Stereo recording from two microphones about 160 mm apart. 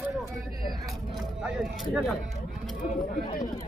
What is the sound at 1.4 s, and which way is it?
Speech, centre (ahead or behind).